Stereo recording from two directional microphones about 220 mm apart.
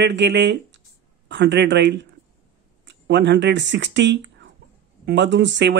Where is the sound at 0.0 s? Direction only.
55° right (ahead or behind).